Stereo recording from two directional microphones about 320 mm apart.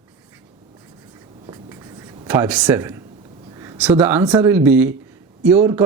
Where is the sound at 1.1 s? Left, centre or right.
Centre.